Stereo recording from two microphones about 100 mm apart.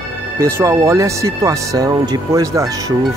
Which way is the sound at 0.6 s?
35° right (ahead or behind).